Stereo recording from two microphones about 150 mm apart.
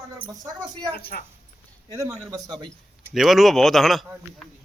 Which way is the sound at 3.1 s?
Centre (ahead or behind).